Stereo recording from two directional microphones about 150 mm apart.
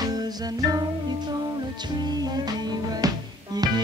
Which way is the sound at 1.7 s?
30° right (ahead or behind).